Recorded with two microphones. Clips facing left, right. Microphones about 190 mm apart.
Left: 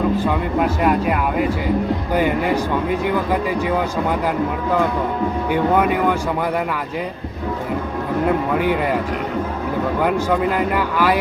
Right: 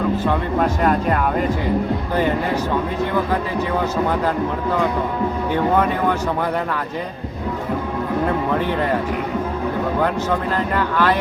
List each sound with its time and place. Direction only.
0.2 s speech: 10° left (ahead or behind)
8.5 s speech: 10° left (ahead or behind)
10.8 s speech: 10° left (ahead or behind)